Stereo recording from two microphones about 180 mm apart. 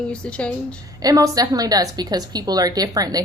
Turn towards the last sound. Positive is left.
turn(degrees=-20)  # may be behind; listen again after turning